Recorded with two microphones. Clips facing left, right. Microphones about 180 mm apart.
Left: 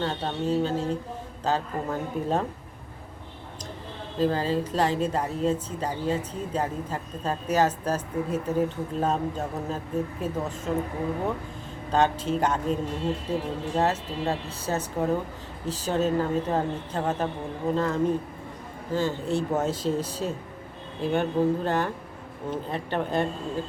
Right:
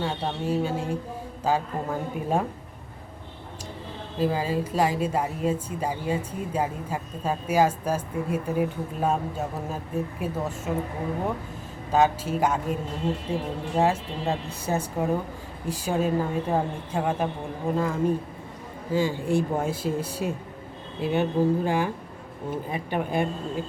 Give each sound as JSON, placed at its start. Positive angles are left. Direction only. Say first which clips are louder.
{"t": 0.0, "sound": "speech", "louder": "even", "side_deg": -10}
{"t": 4.2, "sound": "speech", "louder": "left 1 dB", "side_deg": -10}
{"t": 11.9, "sound": "speech", "louder": "right 1 dB", "side_deg": -10}